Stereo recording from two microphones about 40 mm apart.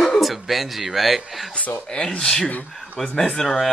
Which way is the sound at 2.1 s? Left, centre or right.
Centre.